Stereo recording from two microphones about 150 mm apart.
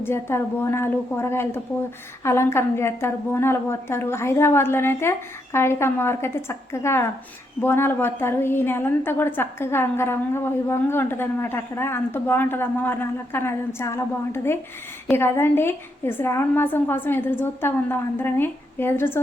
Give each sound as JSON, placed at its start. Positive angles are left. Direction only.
{"t": 0.0, "sound": "a woman's voice", "side_deg": 15}